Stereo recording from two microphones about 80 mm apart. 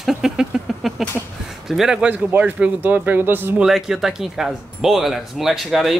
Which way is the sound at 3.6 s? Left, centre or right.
Centre.